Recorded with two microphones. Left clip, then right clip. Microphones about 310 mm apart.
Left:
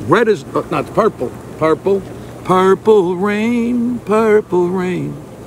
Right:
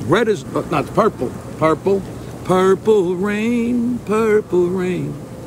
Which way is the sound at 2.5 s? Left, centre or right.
Centre.